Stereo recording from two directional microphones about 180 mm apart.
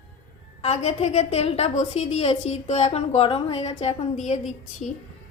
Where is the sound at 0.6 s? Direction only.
35° left (ahead or behind).